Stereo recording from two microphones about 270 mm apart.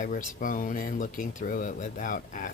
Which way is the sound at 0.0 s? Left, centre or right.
Left.